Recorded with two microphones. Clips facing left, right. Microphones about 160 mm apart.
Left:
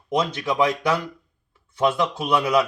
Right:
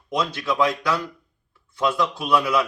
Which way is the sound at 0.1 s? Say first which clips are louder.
Left 2 dB; 20° left (ahead or behind).